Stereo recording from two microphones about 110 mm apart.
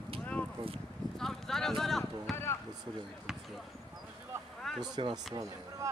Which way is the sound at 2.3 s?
25° left (ahead or behind).